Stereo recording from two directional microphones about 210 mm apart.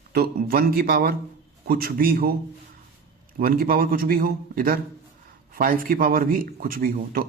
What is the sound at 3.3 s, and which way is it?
A man's voice, 45° right (ahead or behind).